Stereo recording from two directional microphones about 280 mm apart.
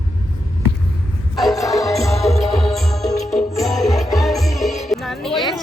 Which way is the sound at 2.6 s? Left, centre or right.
Centre.